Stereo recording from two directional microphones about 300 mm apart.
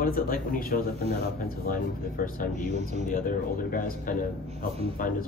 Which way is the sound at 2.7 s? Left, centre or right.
Right.